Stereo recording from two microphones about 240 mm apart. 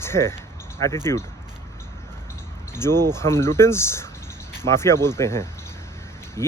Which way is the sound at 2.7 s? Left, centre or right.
Centre.